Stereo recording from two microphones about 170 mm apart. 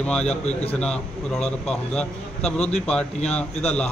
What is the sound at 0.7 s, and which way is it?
A man's voice, 5° left (ahead or behind).